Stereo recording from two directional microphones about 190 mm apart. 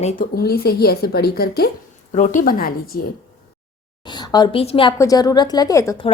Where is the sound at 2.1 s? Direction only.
45° left (ahead or behind).